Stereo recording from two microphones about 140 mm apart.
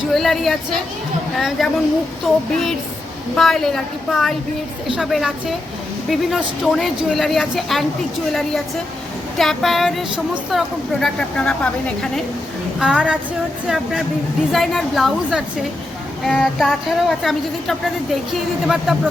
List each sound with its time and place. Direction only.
0.1 s a woman's voice: centre (ahead or behind)
12.8 s female singing: 5° right (ahead or behind)
13.7 s a woman's voice: centre (ahead or behind)